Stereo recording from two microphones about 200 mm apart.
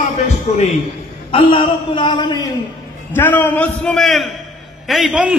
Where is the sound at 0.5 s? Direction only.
35° left (ahead or behind).